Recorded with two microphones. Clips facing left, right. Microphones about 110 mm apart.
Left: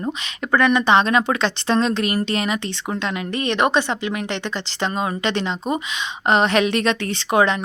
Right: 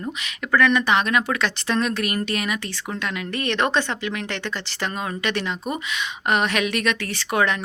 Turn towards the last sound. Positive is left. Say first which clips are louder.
# left 4 dB
turn(degrees=20)  # may be behind; listen again after turning